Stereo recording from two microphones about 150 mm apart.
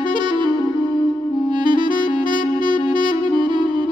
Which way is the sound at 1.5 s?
30° right (ahead or behind).